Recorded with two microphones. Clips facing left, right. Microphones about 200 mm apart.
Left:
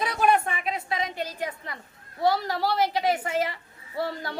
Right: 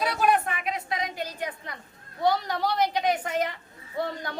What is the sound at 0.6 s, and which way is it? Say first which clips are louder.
Speech: left 1 dB; 30° left (ahead or behind).